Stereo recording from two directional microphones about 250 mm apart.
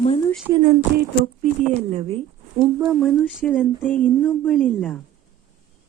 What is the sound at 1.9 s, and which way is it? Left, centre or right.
Speech, right.